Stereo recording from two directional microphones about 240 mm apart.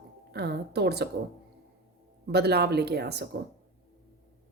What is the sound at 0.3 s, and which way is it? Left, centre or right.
Speech, right.